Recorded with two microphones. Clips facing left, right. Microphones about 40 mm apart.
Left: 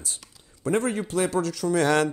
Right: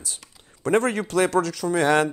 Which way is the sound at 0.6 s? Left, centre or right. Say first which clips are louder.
Right 4 dB; right.